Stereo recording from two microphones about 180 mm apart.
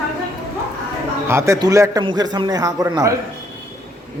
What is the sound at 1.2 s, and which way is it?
A man's voice, 15° right (ahead or behind).